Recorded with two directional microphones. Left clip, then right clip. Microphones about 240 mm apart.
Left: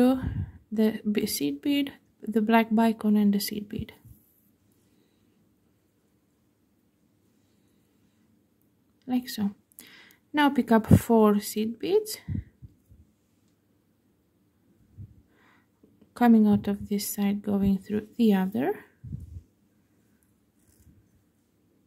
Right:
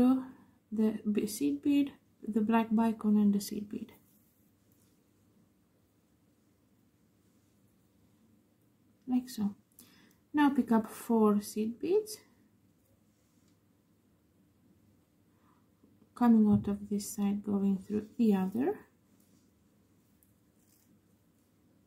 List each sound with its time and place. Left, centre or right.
0.0 s a sound: left
0.7 s speech: left
9.0 s speech: left
16.1 s speech: left